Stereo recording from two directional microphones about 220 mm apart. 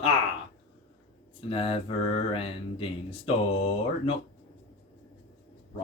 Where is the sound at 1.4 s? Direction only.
25° left (ahead or behind).